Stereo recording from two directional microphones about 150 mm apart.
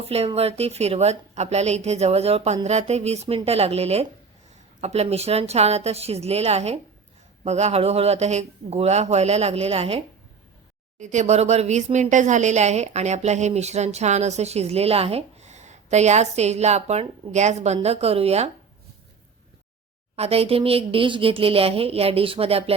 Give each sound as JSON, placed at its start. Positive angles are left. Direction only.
{"t": 0.0, "sound": "speech", "side_deg": -45}
{"t": 20.1, "sound": "speech", "side_deg": -40}